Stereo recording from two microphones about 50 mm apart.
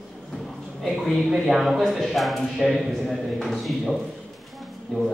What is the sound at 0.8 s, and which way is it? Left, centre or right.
A man's voice, centre.